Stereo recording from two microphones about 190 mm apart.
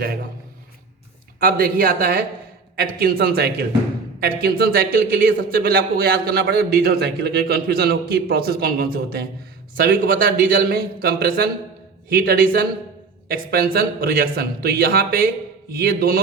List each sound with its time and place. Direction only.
1.4 s a man's voice: 50° right (ahead or behind)